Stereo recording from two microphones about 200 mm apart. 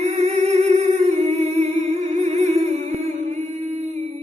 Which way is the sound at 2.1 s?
35° right (ahead or behind).